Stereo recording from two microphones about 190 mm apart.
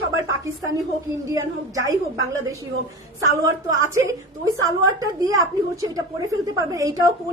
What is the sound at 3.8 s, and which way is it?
A woman's voice, 15° right (ahead or behind).